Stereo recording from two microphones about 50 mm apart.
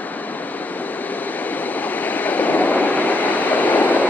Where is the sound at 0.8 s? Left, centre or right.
Left.